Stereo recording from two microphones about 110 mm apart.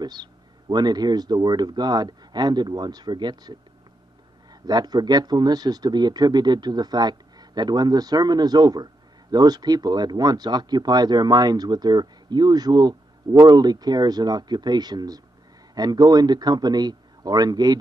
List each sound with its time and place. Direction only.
0.0 s speech: 40° right (ahead or behind)
4.6 s speech: 40° right (ahead or behind)